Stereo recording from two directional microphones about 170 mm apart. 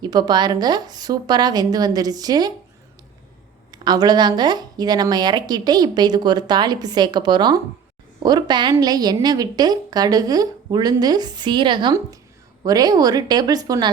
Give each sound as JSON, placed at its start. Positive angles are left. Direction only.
{"t": 0.0, "sound": "a woman's voice", "side_deg": -25}
{"t": 3.7, "sound": "a woman's voice", "side_deg": -25}